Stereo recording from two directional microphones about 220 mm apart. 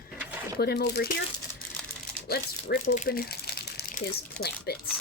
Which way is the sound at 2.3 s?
40° left (ahead or behind).